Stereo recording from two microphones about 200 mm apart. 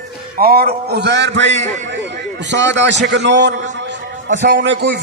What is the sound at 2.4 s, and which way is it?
A man's voice, 60° right (ahead or behind).